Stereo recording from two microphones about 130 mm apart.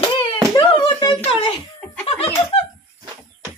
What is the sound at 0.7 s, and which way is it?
Hands, 40° left (ahead or behind).